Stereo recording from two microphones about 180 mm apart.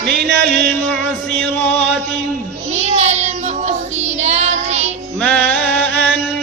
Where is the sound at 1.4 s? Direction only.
10° left (ahead or behind).